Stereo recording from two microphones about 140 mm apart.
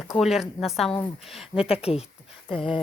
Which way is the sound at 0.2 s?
Centre (ahead or behind).